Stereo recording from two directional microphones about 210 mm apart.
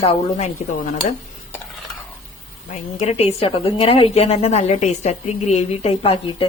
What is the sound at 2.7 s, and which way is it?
A woman's voice, 30° left (ahead or behind).